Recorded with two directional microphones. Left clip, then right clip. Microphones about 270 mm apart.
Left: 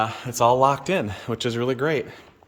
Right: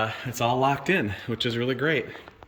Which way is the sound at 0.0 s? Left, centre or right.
Centre.